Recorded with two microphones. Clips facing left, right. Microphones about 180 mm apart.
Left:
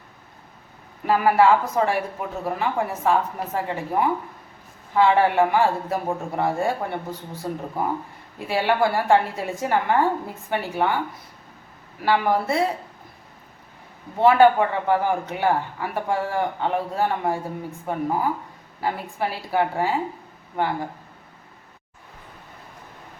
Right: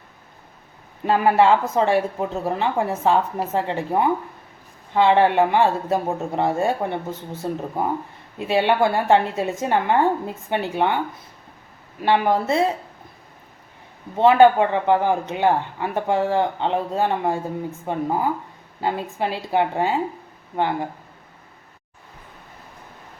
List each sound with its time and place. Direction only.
1.0 s a man's voice: 25° right (ahead or behind)
14.2 s a man's voice: 20° right (ahead or behind)